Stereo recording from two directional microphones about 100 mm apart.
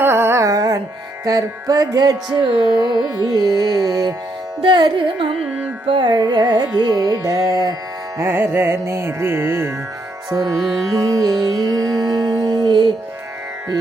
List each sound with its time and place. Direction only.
0.0 s music: 25° right (ahead or behind)
1.2 s carnatic music: 35° right (ahead or behind)
4.6 s carnatic music: 50° right (ahead or behind)
8.2 s music: 25° right (ahead or behind)
10.9 s carnatic music: 40° right (ahead or behind)
11.4 s music: 40° right (ahead or behind)